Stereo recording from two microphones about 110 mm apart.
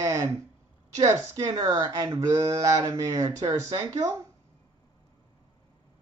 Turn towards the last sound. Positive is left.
turn(degrees=-30)  # may be behind; listen again after turning